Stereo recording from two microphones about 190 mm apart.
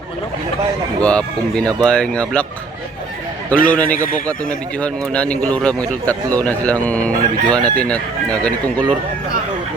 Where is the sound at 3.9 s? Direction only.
45° left (ahead or behind).